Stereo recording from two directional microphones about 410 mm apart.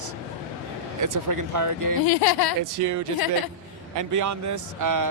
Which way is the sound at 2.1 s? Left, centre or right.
Left.